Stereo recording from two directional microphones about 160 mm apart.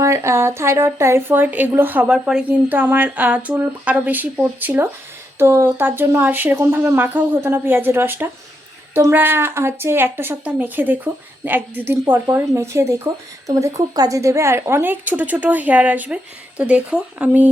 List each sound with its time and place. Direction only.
0.0 s speech: 15° right (ahead or behind)